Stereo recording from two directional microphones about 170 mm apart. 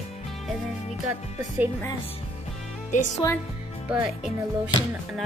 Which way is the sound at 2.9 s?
45° left (ahead or behind).